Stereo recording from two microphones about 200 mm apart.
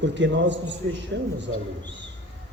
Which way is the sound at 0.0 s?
60° right (ahead or behind).